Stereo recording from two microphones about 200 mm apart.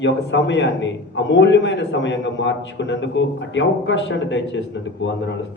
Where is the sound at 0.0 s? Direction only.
65° left (ahead or behind).